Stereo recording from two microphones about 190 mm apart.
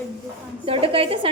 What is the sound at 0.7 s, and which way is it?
Speech, 30° right (ahead or behind).